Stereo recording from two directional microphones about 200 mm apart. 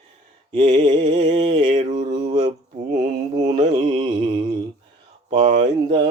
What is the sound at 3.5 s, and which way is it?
Mantra, 25° right (ahead or behind).